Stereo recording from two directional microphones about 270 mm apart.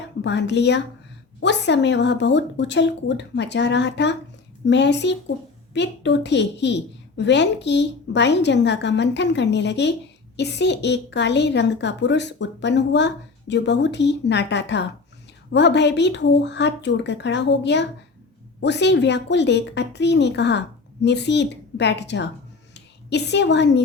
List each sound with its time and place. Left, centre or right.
0.2 s a woman's voice: left